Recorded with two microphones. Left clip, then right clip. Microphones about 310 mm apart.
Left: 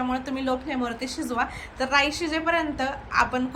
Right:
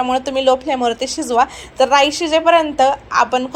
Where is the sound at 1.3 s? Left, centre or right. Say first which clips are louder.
Right 14 dB; right.